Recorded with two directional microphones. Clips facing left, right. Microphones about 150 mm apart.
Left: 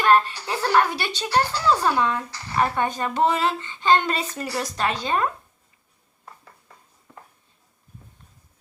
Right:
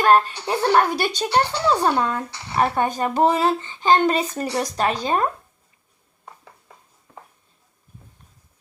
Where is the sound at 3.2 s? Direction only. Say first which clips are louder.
Right 3 dB; 40° right (ahead or behind).